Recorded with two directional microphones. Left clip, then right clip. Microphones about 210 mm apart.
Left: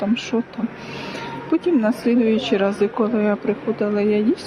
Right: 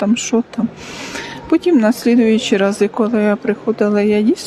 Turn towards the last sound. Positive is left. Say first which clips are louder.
# right 4 dB
turn(degrees=-35)  # may be behind; listen again after turning